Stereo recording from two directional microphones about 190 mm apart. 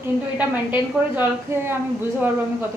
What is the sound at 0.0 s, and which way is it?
A woman's voice, 10° right (ahead or behind).